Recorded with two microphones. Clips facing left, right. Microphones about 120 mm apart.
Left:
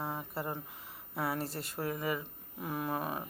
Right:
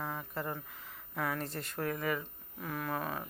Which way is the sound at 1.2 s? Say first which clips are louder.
Left 1 dB; 30° left (ahead or behind).